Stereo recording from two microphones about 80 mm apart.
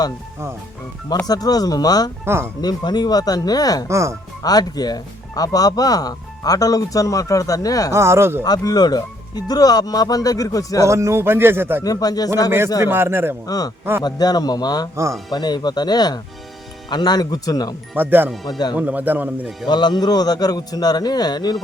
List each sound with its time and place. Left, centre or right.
1.2 s speech: left
2.2 s speech: right
2.6 s a man's voice: left
3.8 s speech: right
4.4 s speech: left
7.9 s speech: right
8.4 s speech: left
10.8 s speech: right
11.8 s speech: left
12.5 s speech: right
14.0 s a man's voice: left
17.9 s speech: right
19.6 s a man's voice: left